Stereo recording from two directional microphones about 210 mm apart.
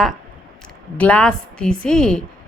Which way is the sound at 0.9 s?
5° left (ahead or behind).